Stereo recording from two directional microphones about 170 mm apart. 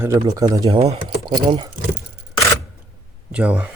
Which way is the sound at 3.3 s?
5° right (ahead or behind).